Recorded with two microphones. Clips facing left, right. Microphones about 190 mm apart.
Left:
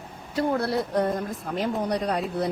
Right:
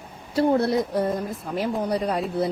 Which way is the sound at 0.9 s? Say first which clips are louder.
Even; 5° right (ahead or behind).